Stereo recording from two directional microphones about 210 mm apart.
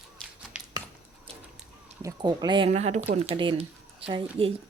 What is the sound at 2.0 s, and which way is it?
Speech, 15° right (ahead or behind).